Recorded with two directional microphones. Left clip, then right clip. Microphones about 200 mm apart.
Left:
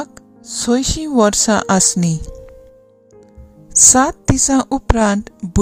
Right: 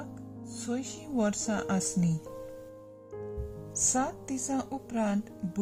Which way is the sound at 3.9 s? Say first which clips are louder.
Left 16 dB; 40° left (ahead or behind).